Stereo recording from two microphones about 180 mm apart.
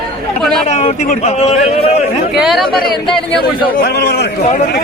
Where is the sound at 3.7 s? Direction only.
65° left (ahead or behind).